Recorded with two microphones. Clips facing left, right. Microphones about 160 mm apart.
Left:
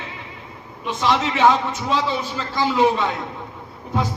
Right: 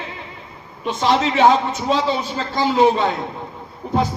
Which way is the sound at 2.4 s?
35° right (ahead or behind).